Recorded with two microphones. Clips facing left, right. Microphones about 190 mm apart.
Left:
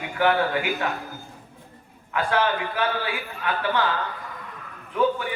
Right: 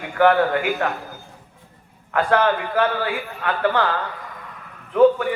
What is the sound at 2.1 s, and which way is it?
Speech, 50° right (ahead or behind).